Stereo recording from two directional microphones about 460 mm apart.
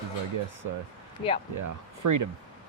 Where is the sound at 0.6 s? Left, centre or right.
Right.